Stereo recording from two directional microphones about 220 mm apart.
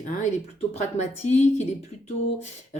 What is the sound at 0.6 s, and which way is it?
Speech, 30° left (ahead or behind).